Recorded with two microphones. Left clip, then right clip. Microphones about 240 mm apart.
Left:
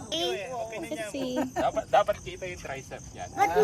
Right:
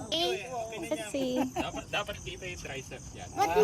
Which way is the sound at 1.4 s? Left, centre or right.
Centre.